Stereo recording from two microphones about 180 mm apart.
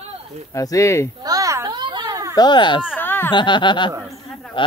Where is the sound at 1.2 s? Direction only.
20° right (ahead or behind).